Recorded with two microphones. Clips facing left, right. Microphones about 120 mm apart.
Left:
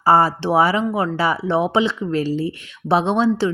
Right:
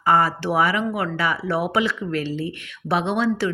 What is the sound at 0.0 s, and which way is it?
Speech, 30° left (ahead or behind).